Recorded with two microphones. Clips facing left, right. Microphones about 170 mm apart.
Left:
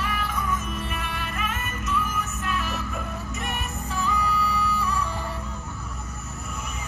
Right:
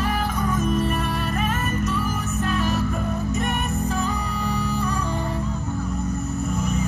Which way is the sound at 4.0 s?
40° right (ahead or behind).